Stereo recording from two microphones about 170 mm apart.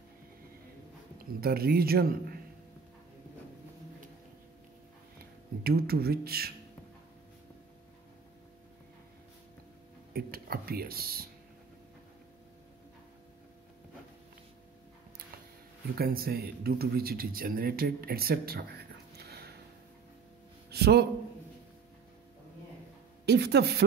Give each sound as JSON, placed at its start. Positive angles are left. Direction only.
{"t": 1.4, "sound": "speech", "side_deg": -65}
{"t": 5.6, "sound": "speech", "side_deg": -65}
{"t": 10.1, "sound": "speech", "side_deg": -60}
{"t": 15.9, "sound": "speech", "side_deg": -60}
{"t": 20.7, "sound": "a man's voice", "side_deg": -70}
{"t": 23.2, "sound": "a woman's voice", "side_deg": -75}